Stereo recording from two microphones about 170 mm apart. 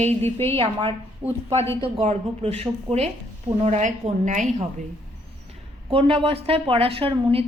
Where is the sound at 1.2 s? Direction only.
10° right (ahead or behind).